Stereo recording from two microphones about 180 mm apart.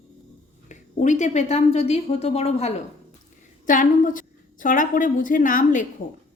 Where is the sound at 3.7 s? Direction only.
45° left (ahead or behind).